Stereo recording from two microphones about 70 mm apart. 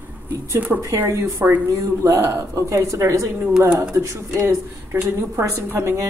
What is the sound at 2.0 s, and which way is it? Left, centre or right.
Speech, right.